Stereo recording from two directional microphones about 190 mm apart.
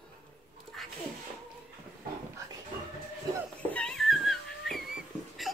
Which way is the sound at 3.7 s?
5° left (ahead or behind).